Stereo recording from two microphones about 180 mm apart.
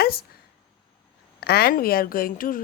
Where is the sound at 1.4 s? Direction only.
60° left (ahead or behind).